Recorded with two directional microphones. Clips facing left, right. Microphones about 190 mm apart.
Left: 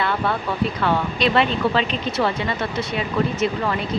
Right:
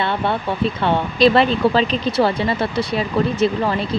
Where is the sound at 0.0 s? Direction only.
25° right (ahead or behind).